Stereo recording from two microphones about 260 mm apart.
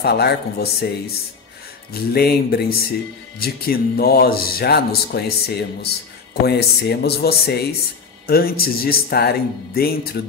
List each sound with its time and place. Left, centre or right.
0.0 s speech: left
1.9 s speech: left